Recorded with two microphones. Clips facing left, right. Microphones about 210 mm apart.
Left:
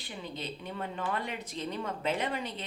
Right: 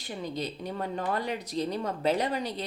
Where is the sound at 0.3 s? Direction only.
40° right (ahead or behind).